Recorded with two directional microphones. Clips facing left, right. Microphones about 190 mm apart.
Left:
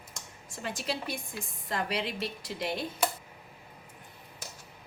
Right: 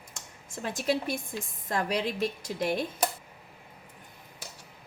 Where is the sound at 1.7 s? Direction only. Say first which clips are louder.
Right 3 dB; 45° right (ahead or behind).